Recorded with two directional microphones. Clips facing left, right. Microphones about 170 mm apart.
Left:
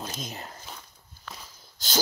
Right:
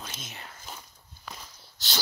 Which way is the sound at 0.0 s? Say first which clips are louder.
Left 6 dB; 40° left (ahead or behind).